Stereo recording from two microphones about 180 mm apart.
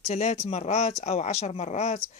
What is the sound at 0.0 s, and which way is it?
Speech, 40° left (ahead or behind).